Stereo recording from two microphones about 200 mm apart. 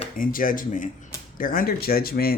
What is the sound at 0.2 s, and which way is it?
Speech, 45° left (ahead or behind).